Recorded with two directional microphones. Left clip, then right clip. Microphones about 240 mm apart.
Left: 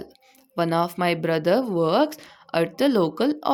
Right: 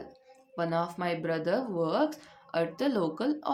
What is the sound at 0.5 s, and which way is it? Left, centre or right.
Speech, left.